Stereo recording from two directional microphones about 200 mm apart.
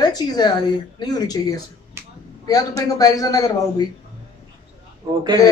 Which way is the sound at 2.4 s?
20° left (ahead or behind).